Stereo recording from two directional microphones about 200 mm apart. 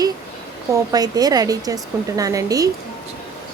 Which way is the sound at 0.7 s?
20° right (ahead or behind).